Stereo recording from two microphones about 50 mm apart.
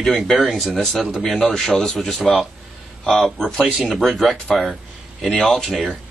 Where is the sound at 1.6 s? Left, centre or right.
Centre.